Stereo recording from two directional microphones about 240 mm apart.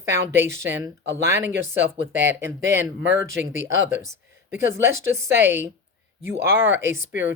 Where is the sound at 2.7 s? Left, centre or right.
Right.